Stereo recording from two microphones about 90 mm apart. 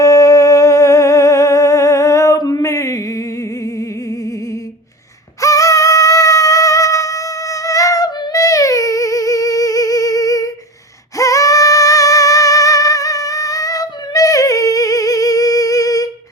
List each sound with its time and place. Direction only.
0.0 s humming: 35° left (ahead or behind)
5.4 s music: 35° left (ahead or behind)
11.2 s singing: 40° left (ahead or behind)